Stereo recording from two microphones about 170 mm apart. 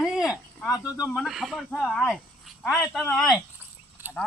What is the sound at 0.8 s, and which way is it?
Speech, 15° left (ahead or behind).